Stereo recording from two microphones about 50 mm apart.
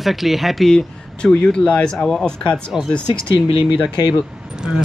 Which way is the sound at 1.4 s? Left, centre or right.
Centre.